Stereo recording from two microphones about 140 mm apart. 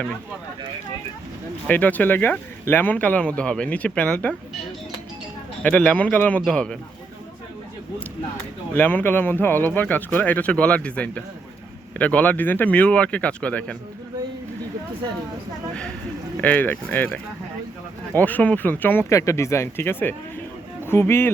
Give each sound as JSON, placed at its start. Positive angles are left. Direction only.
{"t": 1.6, "sound": "speech", "side_deg": 10}
{"t": 5.6, "sound": "speech", "side_deg": 10}
{"t": 8.7, "sound": "speech", "side_deg": 15}
{"t": 16.4, "sound": "speech", "side_deg": 10}